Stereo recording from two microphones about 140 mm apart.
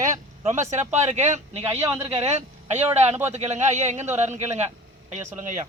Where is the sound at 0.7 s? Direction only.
55° right (ahead or behind).